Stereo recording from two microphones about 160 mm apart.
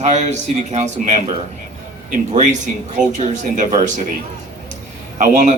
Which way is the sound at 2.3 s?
50° right (ahead or behind).